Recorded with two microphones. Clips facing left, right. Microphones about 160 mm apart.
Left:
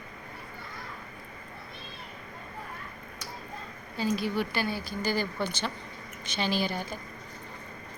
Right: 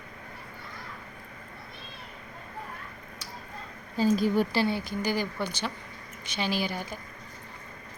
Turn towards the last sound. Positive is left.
turn(degrees=-10)  # may be behind; listen again after turning